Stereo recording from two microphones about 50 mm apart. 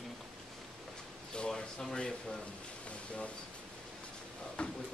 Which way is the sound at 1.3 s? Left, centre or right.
Centre.